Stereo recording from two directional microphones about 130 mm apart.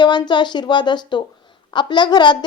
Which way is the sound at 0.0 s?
35° left (ahead or behind).